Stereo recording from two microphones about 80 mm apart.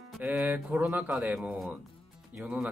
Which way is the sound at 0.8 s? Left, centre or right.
Centre.